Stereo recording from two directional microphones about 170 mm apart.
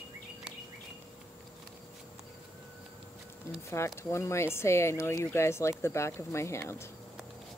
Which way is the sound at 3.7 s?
15° left (ahead or behind).